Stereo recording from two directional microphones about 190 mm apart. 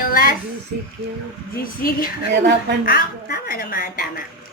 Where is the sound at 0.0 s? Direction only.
50° left (ahead or behind).